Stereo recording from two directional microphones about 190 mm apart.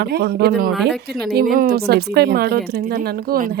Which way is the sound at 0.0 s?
60° right (ahead or behind).